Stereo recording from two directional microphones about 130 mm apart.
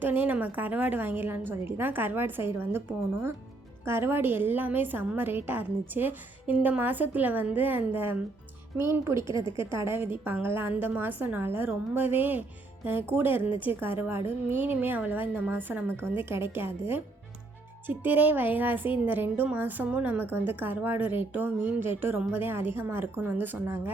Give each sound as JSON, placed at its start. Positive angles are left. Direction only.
{"t": 0.0, "sound": "speech", "side_deg": -15}
{"t": 3.8, "sound": "speech", "side_deg": -20}
{"t": 17.8, "sound": "speech", "side_deg": -15}